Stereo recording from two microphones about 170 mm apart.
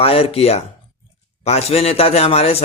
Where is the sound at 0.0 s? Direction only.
35° left (ahead or behind).